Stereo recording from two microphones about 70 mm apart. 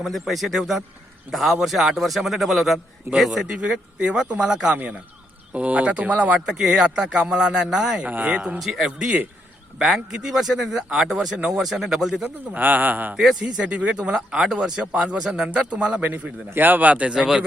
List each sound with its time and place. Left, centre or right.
0.0 s a man's voice: centre
6.6 s speech: centre
8.0 s a man's voice: right
8.5 s a man's voice: centre
12.2 s a man's voice: right
17.2 s speech: centre